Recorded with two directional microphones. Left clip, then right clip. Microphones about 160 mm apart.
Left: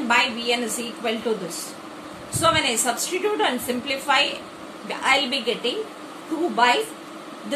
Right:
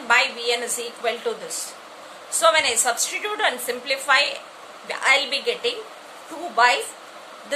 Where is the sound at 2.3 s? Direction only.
50° right (ahead or behind).